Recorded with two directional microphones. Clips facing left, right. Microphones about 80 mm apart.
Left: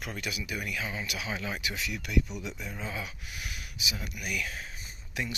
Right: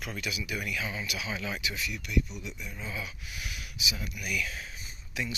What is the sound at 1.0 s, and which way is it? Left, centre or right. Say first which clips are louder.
Speech: even; left.